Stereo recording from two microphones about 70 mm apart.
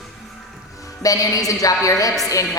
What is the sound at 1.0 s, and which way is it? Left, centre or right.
Speech, left.